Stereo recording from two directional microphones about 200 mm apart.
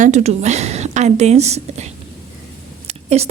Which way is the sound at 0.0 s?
35° right (ahead or behind).